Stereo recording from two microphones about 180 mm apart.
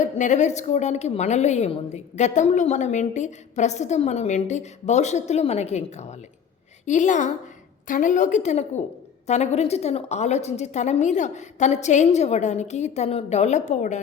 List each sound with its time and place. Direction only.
0.0 s a woman's voice: 40° left (ahead or behind)